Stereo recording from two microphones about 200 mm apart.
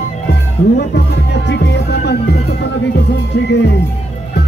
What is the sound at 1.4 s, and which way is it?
Music, 60° left (ahead or behind).